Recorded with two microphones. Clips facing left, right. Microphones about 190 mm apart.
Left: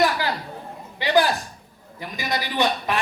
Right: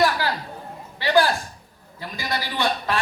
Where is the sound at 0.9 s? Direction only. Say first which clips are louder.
Even; 20° left (ahead or behind).